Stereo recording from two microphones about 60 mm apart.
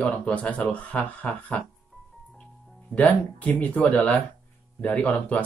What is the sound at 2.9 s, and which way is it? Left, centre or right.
Speech, left.